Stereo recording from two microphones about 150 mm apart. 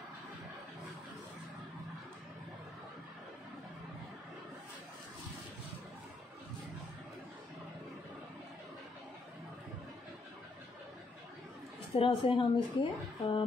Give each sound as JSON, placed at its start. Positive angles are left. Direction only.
{"t": 11.9, "sound": "a woman's voice", "side_deg": 35}